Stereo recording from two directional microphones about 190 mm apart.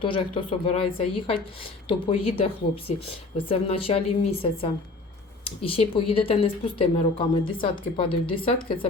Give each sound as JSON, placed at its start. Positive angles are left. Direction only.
{"t": 0.0, "sound": "speech", "side_deg": 25}